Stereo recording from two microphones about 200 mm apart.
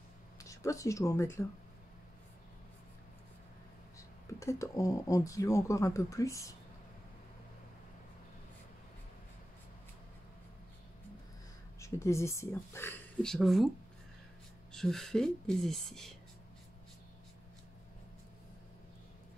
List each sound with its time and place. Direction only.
0.4 s speech: 15° left (ahead or behind)
4.3 s speech: 15° left (ahead or behind)
11.8 s speech: 15° left (ahead or behind)
14.7 s speech: centre (ahead or behind)